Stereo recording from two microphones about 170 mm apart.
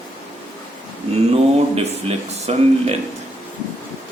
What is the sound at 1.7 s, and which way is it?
Speech, 40° right (ahead or behind).